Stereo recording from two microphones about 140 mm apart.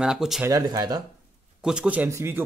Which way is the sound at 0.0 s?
5° right (ahead or behind).